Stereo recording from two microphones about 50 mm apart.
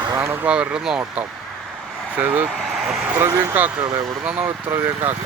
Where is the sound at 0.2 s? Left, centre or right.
Right.